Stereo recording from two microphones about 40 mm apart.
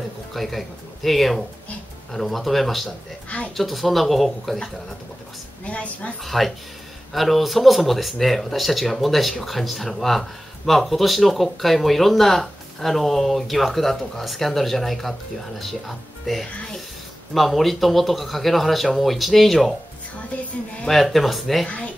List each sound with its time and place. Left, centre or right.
0.3 s speech: centre
5.7 s speech: left
6.2 s speech: centre
20.9 s speech: centre
21.6 s speech: left